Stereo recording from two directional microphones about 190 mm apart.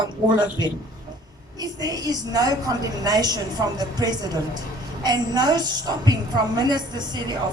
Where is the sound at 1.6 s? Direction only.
20° right (ahead or behind).